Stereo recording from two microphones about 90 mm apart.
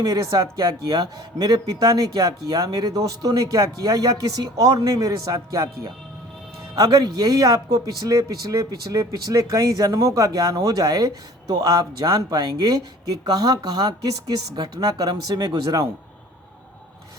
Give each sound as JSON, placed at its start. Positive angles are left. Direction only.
{"t": 0.0, "sound": "a man's voice", "side_deg": -45}
{"t": 6.7, "sound": "a man's voice", "side_deg": -45}